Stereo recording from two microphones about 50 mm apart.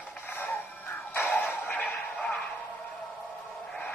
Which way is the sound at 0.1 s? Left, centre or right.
Left.